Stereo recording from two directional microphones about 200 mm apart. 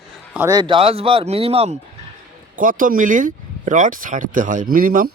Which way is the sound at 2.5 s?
45° right (ahead or behind).